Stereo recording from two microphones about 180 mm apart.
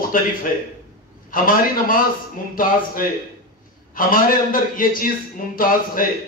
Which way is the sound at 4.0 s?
50° left (ahead or behind).